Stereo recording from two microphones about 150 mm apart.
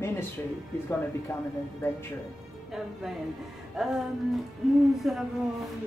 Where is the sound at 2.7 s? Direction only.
Centre (ahead or behind).